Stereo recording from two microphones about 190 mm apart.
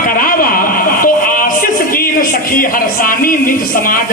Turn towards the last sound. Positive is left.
turn(degrees=45)  # may be behind; listen again after turning